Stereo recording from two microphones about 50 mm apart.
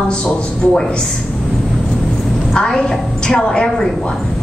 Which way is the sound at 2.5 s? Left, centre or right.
Centre.